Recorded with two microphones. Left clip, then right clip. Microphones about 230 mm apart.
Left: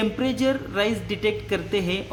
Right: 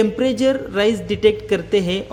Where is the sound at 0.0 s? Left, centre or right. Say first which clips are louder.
Right 7 dB; centre.